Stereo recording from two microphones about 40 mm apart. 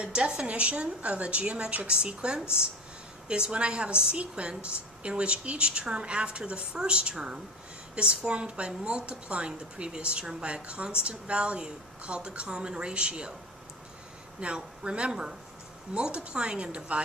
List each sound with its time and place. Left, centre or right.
0.0 s a woman's voice: right
14.4 s a woman's voice: right
15.1 s speech: centre
16.0 s a woman's voice: right